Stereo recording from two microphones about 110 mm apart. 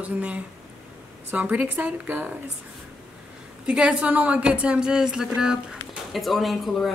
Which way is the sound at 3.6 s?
10° right (ahead or behind).